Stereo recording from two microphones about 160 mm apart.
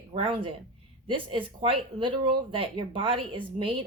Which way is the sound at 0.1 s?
35° right (ahead or behind).